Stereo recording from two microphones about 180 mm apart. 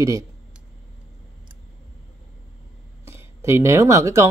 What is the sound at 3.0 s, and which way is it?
Speech, 15° right (ahead or behind).